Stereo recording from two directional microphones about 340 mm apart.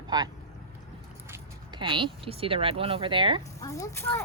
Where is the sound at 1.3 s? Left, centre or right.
Centre.